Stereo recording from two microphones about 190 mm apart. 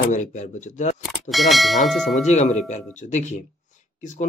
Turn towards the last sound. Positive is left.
turn(degrees=40)  # may be behind; listen again after turning